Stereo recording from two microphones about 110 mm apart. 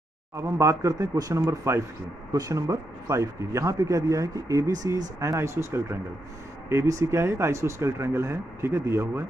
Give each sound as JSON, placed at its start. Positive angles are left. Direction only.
{"t": 0.4, "sound": "a man's voice", "side_deg": -25}